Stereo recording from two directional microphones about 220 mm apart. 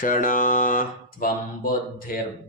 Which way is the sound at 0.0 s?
35° left (ahead or behind).